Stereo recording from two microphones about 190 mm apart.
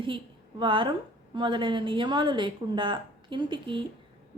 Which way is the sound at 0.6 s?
25° right (ahead or behind).